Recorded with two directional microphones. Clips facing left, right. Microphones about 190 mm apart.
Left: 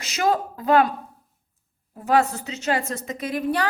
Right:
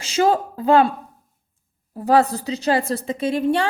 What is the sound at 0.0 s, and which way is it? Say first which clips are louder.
A woman's voice: right 4 dB; 30° right (ahead or behind).